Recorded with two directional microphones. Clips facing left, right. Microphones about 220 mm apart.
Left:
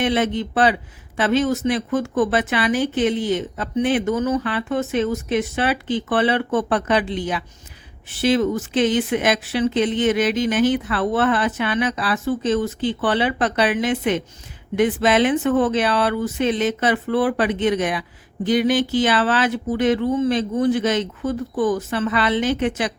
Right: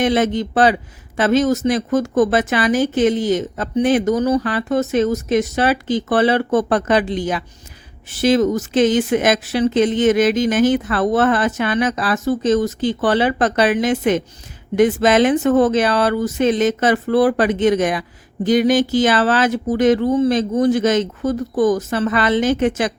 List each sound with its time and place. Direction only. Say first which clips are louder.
0.0 s a man's voice: right 3 dB; 40° right (ahead or behind)